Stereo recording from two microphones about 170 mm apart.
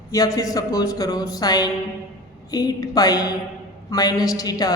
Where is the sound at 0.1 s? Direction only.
20° left (ahead or behind).